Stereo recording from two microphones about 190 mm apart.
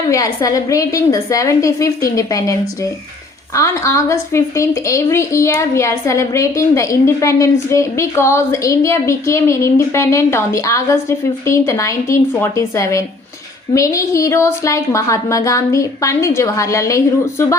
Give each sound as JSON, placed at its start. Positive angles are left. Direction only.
{"t": 0.1, "sound": "a woman's voice", "side_deg": 15}